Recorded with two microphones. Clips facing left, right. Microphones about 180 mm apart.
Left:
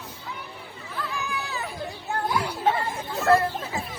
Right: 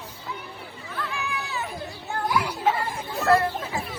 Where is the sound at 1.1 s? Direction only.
35° left (ahead or behind).